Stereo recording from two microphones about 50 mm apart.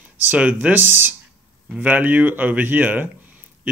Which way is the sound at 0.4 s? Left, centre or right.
Right.